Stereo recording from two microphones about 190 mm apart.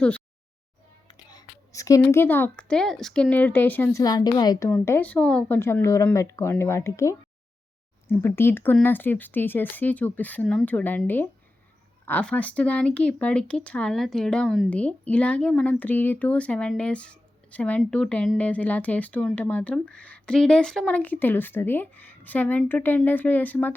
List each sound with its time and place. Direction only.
1.1 s a woman's voice: 20° left (ahead or behind)
4.0 s a woman's voice: 20° left (ahead or behind)
4.7 s speech: 10° left (ahead or behind)